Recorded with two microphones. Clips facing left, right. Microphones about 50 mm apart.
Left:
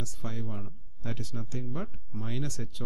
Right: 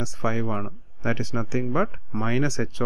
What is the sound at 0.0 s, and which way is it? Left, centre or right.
Speech, right.